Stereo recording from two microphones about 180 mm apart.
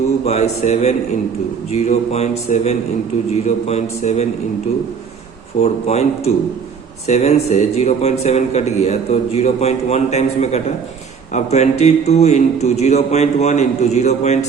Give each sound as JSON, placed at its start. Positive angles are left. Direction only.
{"t": 0.3, "sound": "speech", "side_deg": 40}
{"t": 5.5, "sound": "speech", "side_deg": 35}